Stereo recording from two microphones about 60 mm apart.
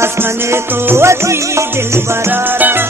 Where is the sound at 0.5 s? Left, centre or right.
Right.